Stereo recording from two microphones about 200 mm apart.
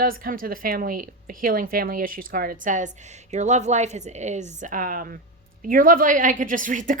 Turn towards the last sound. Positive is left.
turn(degrees=-40)  # may be behind; listen again after turning